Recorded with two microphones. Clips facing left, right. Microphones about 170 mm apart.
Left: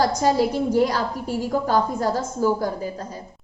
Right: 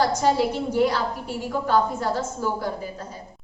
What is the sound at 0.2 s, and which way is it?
A woman's voice, 40° left (ahead or behind).